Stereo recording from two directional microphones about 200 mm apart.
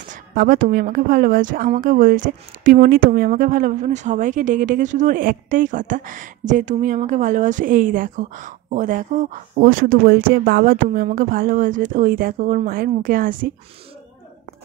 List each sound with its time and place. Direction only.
0.1 s a woman's voice: 45° right (ahead or behind)